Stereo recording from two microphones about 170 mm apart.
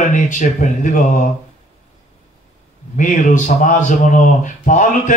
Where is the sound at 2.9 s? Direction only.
50° left (ahead or behind).